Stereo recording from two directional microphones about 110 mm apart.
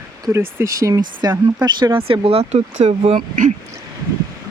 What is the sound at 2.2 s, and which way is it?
Speech, 70° right (ahead or behind).